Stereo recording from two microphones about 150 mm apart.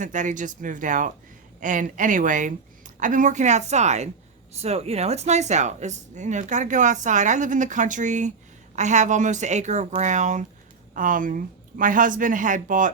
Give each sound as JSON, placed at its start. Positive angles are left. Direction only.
{"t": 0.0, "sound": "a woman's voice", "side_deg": -55}